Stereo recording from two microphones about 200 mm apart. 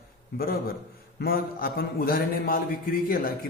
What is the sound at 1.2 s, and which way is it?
A man's voice, 50° left (ahead or behind).